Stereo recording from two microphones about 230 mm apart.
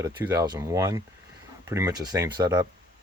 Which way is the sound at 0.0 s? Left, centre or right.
Centre.